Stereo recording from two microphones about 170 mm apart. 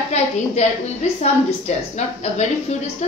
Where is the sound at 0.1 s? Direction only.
40° left (ahead or behind).